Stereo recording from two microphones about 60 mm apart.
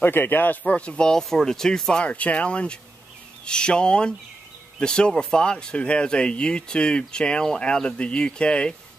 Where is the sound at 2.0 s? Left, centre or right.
Left.